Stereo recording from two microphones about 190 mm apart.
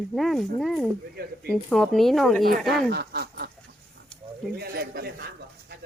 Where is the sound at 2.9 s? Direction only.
60° right (ahead or behind).